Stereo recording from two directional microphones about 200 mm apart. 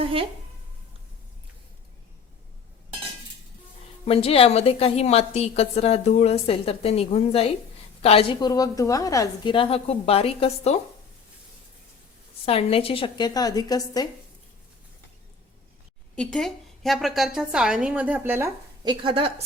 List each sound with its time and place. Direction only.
0.0 s a woman's voice: 25° right (ahead or behind)
4.0 s a woman's voice: 30° left (ahead or behind)
12.5 s a woman's voice: 30° left (ahead or behind)
16.1 s a woman's voice: 5° left (ahead or behind); by 18.9 s 15° right (ahead or behind)
19.0 s a woman's voice: 25° right (ahead or behind)